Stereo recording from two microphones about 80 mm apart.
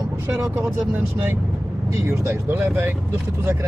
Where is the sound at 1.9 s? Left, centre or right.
Right.